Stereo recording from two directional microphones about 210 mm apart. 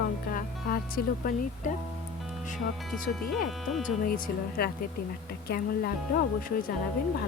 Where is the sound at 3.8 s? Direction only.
40° left (ahead or behind).